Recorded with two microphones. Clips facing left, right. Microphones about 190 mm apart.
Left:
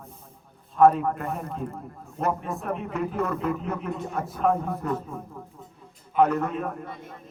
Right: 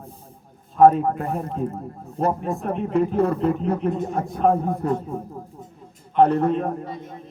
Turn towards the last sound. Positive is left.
turn(degrees=-30)  # may be behind; listen again after turning